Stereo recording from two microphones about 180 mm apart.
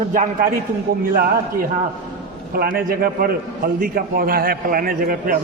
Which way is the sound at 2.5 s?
55° right (ahead or behind).